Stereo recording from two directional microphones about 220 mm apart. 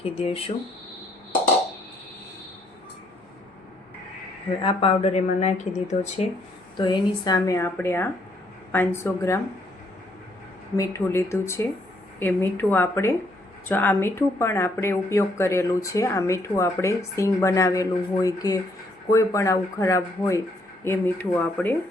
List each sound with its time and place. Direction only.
0.0 s speech: 25° left (ahead or behind)
4.6 s speech: 25° left (ahead or behind)
6.7 s a woman's voice: 20° left (ahead or behind)
10.8 s a woman's voice: 10° left (ahead or behind)